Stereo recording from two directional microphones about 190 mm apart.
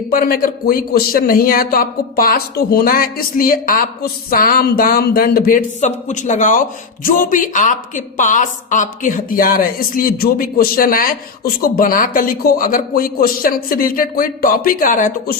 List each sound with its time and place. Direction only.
0.1 s a man's voice: 50° left (ahead or behind)